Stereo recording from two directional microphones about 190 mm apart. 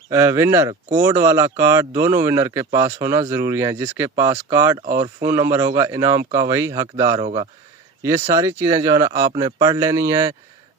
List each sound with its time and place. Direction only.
0.1 s speech: 15° right (ahead or behind)